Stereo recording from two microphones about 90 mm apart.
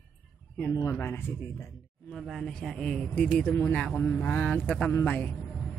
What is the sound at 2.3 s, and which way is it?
A man's voice, 5° left (ahead or behind).